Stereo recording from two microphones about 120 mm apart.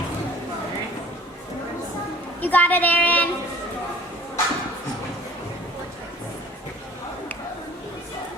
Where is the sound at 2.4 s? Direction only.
15° left (ahead or behind).